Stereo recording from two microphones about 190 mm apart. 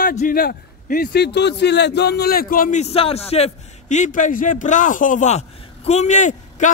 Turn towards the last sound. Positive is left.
turn(degrees=40)  # may be behind; listen again after turning